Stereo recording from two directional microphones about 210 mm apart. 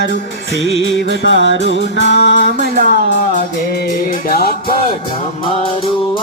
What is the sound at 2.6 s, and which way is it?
Music, 45° right (ahead or behind).